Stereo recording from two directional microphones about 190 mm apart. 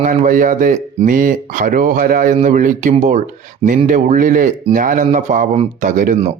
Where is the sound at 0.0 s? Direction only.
40° right (ahead or behind).